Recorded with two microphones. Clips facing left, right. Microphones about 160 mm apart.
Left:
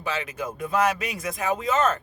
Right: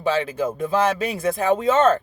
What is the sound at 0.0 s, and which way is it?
Speech, 30° right (ahead or behind).